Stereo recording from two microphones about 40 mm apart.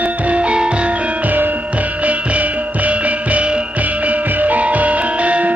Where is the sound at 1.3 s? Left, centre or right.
Right.